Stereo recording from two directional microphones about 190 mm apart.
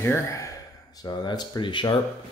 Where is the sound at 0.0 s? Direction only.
15° left (ahead or behind).